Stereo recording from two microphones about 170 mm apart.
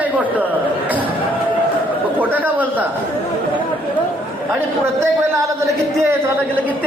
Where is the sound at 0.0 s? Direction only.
10° right (ahead or behind).